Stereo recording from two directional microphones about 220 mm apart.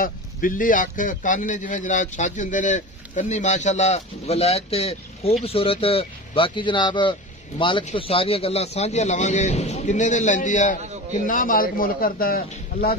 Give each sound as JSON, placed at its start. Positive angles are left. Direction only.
{"t": 0.0, "sound": "a man's voice", "side_deg": 40}